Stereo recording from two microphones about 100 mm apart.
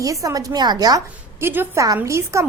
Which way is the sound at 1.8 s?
35° right (ahead or behind).